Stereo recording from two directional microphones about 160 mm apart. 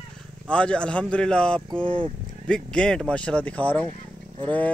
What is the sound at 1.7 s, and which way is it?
Speech, 30° right (ahead or behind).